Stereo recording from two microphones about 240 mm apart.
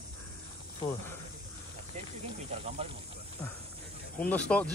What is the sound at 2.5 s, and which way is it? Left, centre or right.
Speech, right.